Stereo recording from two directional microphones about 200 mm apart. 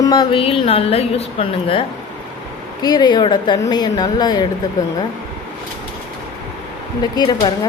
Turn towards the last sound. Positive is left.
turn(degrees=20)  # may be behind; listen again after turning